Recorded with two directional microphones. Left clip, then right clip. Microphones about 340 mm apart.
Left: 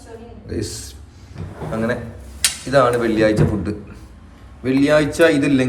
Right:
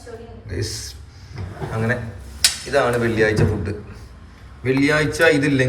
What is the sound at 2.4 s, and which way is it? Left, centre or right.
Speech, centre.